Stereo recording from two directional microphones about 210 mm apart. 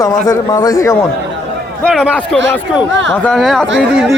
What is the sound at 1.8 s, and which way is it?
A man's voice, centre (ahead or behind).